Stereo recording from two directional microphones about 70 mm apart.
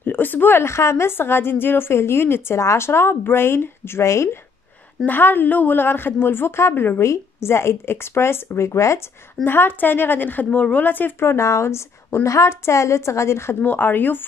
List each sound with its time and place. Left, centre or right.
0.0 s a woman's voice: left
5.0 s a woman's voice: left
7.0 s a woman's voice: left
9.4 s a woman's voice: left
13.6 s a woman's voice: left